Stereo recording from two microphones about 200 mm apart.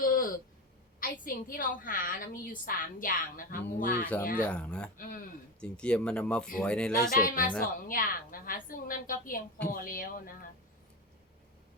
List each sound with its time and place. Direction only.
0.0 s a sound: 45° left (ahead or behind)
0.9 s a woman's voice: 45° left (ahead or behind)
4.4 s speech: 5° left (ahead or behind)
4.9 s a woman's voice: 45° left (ahead or behind)
5.5 s speech: 5° left (ahead or behind)
7.1 s a woman's voice: 45° left (ahead or behind)